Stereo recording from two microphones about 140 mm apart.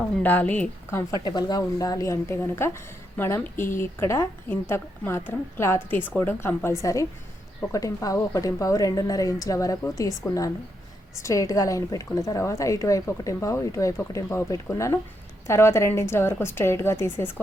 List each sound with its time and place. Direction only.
0.2 s a woman's voice: 10° left (ahead or behind)
1.2 s a woman's voice: 30° left (ahead or behind)